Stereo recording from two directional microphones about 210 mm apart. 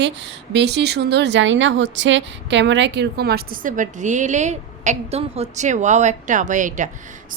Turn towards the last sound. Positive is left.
turn(degrees=-35)  # may be behind; listen again after turning